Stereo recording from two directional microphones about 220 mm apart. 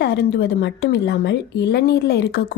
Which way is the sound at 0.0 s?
50° left (ahead or behind).